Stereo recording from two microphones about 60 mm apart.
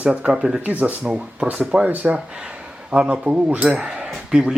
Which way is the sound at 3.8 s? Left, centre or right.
Centre.